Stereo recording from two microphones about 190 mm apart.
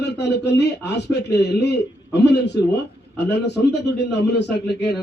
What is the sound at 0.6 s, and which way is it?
A man's voice, 60° left (ahead or behind).